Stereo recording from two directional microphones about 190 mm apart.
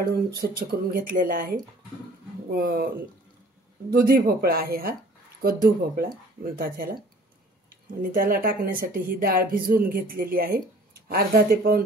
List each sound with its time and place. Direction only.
0.1 s speech: 55° right (ahead or behind)
2.6 s speech: 50° right (ahead or behind)
3.9 s speech: 50° right (ahead or behind)
8.1 s speech: 50° right (ahead or behind)